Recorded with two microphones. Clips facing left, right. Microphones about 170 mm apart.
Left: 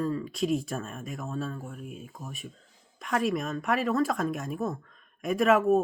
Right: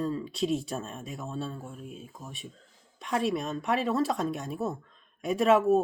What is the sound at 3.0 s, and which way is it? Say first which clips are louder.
A woman's voice: left 1 dB; 30° right (ahead or behind).